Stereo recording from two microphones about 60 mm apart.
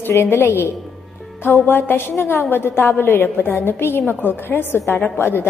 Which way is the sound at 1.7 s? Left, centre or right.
Left.